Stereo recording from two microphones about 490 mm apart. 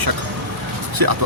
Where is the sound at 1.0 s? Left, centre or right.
Right.